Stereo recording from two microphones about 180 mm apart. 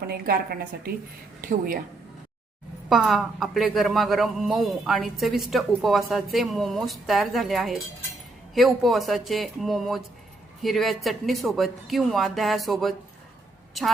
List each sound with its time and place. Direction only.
0.1 s a woman's voice: 55° right (ahead or behind)
2.9 s a man's voice: centre (ahead or behind)